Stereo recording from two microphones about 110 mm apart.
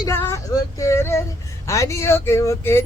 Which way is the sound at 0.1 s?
25° left (ahead or behind).